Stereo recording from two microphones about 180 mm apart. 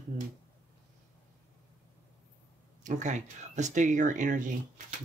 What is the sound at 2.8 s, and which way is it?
Speech, 45° right (ahead or behind).